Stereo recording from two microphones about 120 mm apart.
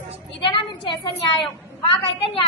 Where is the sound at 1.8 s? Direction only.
50° left (ahead or behind).